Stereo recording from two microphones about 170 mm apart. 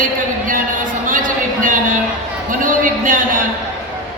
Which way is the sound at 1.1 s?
50° right (ahead or behind).